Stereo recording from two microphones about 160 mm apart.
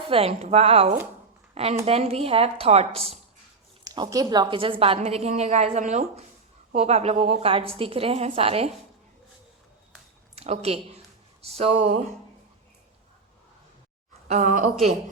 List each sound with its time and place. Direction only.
0.1 s a woman's voice: 35° right (ahead or behind)
3.8 s a woman's voice: 25° right (ahead or behind)
10.3 s a woman's voice: 40° right (ahead or behind)
14.3 s a woman's voice: 45° right (ahead or behind)